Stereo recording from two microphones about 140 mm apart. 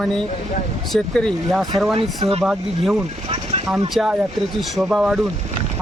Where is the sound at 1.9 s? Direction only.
45° right (ahead or behind).